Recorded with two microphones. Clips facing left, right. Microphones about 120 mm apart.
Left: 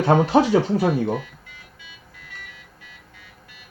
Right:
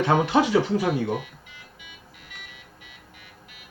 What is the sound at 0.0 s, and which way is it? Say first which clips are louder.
Speech: left 4 dB; 35° left (ahead or behind).